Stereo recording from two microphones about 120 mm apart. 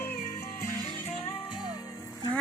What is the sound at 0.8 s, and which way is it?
Music, 55° left (ahead or behind).